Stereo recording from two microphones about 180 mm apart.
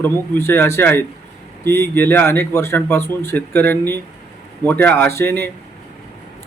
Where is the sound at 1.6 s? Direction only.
65° right (ahead or behind).